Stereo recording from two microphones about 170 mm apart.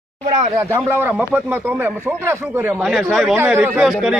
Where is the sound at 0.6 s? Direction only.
15° right (ahead or behind).